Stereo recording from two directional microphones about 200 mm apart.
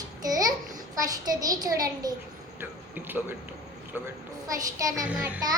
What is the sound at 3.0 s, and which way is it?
Speech, 10° right (ahead or behind).